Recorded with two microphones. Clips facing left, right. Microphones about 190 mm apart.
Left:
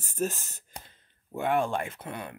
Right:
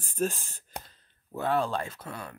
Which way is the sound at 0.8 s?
15° left (ahead or behind).